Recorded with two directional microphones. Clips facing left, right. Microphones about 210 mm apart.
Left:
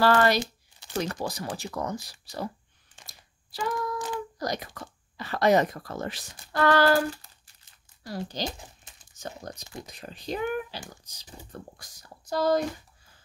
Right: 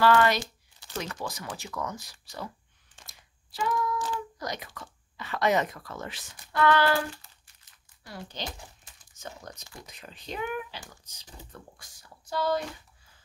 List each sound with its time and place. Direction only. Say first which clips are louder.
0.0 s speech: left 1 dB; 35° left (ahead or behind)
3.1 s a sound: left 2 dB; 35° left (ahead or behind)
4.4 s speech: left 5 dB; 40° left (ahead or behind)
7.6 s a sound: left 8 dB; 40° left (ahead or behind)
8.5 s crumpling: left 4 dB; 25° left (ahead or behind)
9.2 s crumpling: left 4 dB; 35° left (ahead or behind)
9.8 s speech: left 6 dB; 35° left (ahead or behind)